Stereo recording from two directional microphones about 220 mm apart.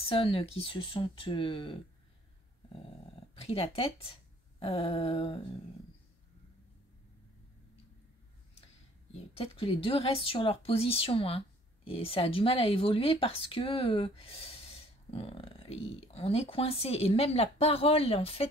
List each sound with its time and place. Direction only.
0.0 s speech: 25° left (ahead or behind)
3.3 s speech: 25° left (ahead or behind)
9.3 s speech: 25° left (ahead or behind)